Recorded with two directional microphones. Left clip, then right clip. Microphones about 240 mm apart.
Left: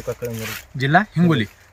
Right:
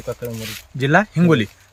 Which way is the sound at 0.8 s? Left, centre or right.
Centre.